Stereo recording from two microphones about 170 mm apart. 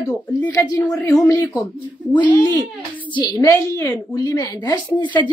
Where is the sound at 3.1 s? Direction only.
25° left (ahead or behind).